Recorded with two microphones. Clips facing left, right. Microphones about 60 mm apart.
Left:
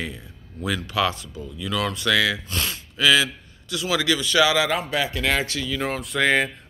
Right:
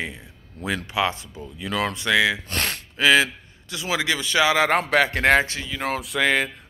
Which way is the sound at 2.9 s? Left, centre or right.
Right.